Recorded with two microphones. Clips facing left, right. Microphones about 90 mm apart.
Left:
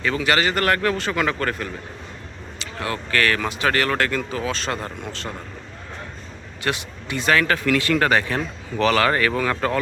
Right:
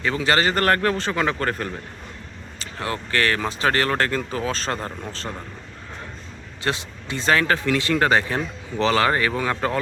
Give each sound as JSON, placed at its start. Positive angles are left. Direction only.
{"t": 0.0, "sound": "speech", "side_deg": -30}
{"t": 6.6, "sound": "speech", "side_deg": -30}